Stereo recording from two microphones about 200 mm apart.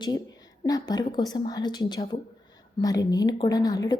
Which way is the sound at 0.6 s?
20° left (ahead or behind).